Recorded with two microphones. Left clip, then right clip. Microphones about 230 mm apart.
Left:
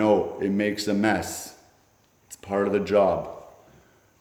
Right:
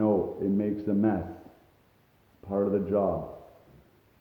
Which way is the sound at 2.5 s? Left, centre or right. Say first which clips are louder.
Left 5 dB; centre.